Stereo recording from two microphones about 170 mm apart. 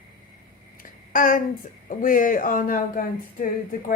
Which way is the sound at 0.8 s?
55° left (ahead or behind).